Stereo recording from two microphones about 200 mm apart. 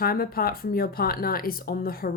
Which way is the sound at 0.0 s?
50° left (ahead or behind).